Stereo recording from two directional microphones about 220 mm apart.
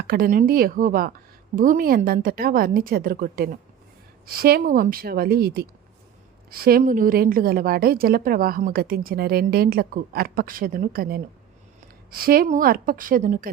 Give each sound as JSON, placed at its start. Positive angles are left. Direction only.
{"t": 0.0, "sound": "a woman's voice", "side_deg": -40}